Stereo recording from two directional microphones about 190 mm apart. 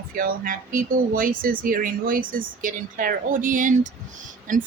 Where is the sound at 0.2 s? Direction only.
45° right (ahead or behind).